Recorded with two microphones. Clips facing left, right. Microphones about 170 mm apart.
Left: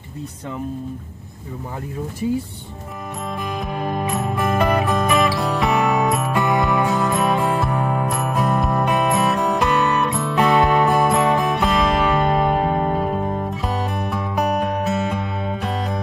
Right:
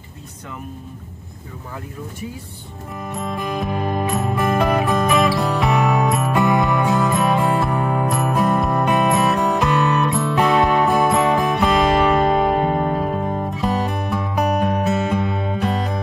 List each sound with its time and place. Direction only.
3.2 s music: centre (ahead or behind)